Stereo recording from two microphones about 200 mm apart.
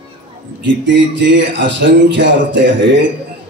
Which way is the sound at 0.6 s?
65° right (ahead or behind).